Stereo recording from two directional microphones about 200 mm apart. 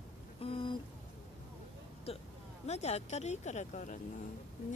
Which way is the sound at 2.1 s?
30° left (ahead or behind).